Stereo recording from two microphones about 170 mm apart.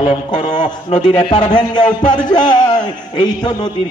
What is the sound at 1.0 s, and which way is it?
Speech, 25° left (ahead or behind).